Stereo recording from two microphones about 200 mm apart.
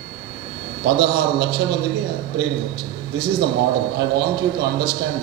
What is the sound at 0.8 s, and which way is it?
A man's voice, 55° right (ahead or behind).